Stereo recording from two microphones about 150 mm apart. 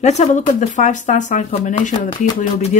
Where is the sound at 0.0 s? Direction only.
50° left (ahead or behind).